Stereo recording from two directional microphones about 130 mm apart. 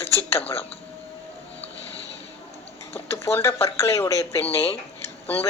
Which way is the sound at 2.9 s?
20° left (ahead or behind).